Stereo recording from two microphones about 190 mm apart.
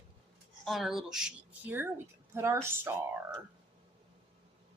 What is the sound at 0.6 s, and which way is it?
Speech, centre (ahead or behind).